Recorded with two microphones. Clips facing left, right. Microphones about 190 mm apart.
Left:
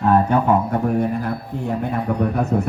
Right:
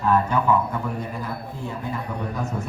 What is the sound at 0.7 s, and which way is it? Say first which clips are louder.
A man's voice: left 9 dB; 65° left (ahead or behind).